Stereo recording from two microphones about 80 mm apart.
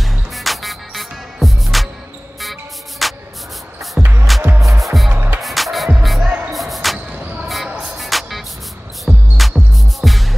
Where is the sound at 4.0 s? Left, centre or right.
Centre.